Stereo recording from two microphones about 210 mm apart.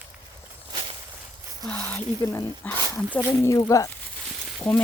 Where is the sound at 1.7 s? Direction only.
5° left (ahead or behind).